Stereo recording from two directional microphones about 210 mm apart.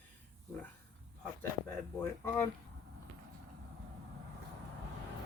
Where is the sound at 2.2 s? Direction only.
15° left (ahead or behind).